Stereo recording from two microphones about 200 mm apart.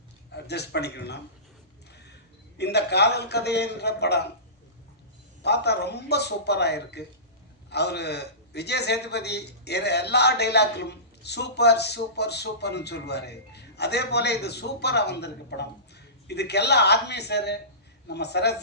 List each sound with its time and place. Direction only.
0.3 s speech: 55° left (ahead or behind)
2.6 s a man's voice: 55° left (ahead or behind)
5.4 s a man's voice: 55° left (ahead or behind)